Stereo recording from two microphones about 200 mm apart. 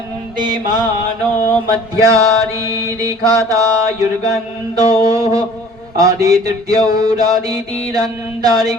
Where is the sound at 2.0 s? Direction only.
15° right (ahead or behind).